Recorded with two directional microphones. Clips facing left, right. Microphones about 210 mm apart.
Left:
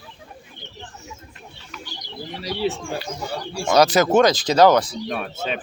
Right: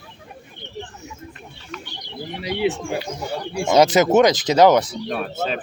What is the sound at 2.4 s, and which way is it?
Speech, 15° right (ahead or behind).